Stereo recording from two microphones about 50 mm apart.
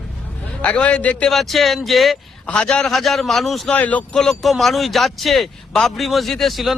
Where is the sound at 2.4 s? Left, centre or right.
Left.